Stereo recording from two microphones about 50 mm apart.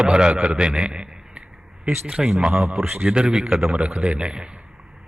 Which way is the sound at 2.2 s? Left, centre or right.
Centre.